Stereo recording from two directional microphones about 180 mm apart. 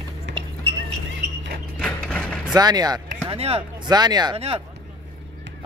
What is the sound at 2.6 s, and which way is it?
Speech, 20° right (ahead or behind).